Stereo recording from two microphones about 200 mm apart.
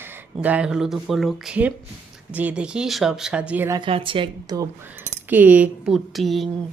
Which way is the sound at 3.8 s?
25° right (ahead or behind).